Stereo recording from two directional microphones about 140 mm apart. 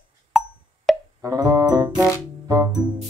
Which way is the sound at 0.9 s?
Centre (ahead or behind).